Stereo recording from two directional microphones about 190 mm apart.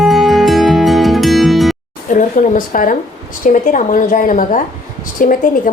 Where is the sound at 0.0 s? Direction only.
Centre (ahead or behind).